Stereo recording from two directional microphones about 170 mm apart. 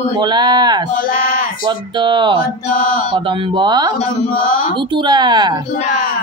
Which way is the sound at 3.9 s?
35° left (ahead or behind).